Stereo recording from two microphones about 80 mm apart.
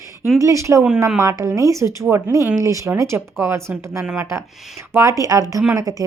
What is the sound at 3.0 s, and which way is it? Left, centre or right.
Speech, right.